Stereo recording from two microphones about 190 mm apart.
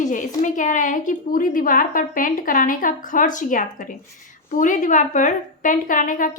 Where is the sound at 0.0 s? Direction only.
45° left (ahead or behind).